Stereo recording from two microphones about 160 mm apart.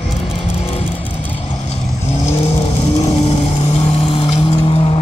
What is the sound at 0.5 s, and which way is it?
Music, 40° left (ahead or behind).